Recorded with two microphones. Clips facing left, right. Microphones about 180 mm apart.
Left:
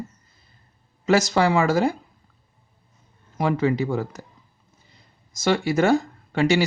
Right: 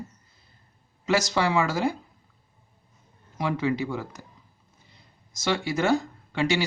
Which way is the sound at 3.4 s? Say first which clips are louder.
Left 5 dB; 45° left (ahead or behind).